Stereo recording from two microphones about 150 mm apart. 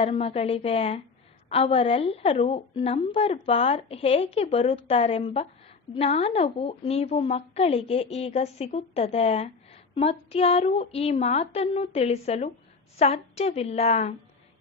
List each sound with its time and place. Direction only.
0.0 s a woman's voice: 40° left (ahead or behind)